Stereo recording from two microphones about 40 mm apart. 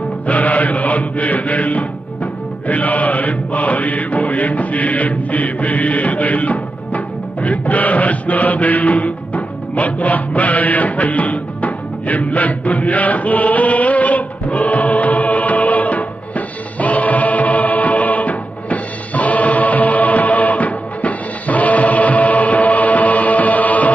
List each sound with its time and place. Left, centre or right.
0.3 s music: left
2.6 s mantra: left
7.4 s chant: left